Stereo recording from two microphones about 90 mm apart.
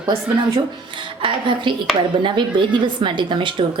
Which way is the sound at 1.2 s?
65° right (ahead or behind).